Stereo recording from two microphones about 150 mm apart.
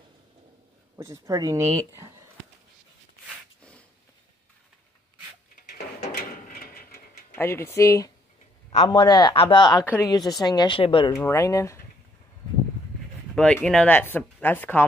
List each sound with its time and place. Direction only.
0.9 s speech: 20° right (ahead or behind)
5.7 s a sound: 85° left
7.3 s speech: 15° left (ahead or behind); by 11.1 s 35° left (ahead or behind)
11.2 s speech: 20° left (ahead or behind)
13.3 s speech: 10° left (ahead or behind)